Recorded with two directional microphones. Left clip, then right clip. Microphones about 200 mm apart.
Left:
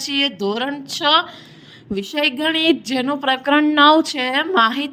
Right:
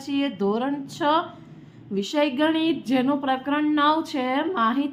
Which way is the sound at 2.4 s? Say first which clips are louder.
Left 6 dB; 40° left (ahead or behind).